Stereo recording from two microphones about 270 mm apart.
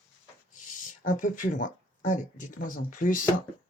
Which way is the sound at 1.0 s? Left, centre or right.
Left.